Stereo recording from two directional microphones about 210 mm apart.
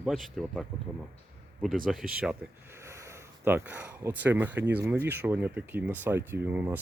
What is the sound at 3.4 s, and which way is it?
Speech, 10° right (ahead or behind).